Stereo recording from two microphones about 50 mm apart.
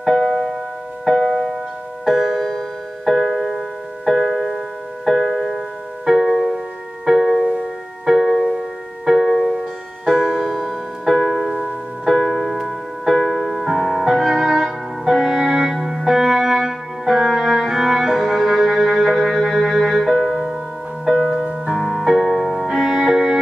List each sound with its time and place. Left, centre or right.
0.0 s music: centre
1.0 s piano: centre
2.0 s music: centre
6.0 s music: centre
8.1 s music: centre
11.1 s music: centre
11.6 s music: centre
12.2 s music: centre
12.5 s music: centre
13.2 s music: centre
13.7 s music: centre